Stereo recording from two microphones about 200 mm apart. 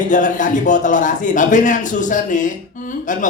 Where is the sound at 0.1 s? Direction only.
40° left (ahead or behind).